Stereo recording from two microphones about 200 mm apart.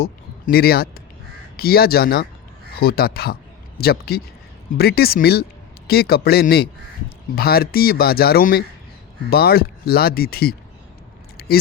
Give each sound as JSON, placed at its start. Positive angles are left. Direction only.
{"t": 0.0, "sound": "speech", "side_deg": 50}
{"t": 11.3, "sound": "keys jangling", "side_deg": 50}